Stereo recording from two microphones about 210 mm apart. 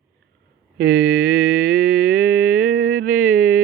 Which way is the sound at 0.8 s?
45° right (ahead or behind).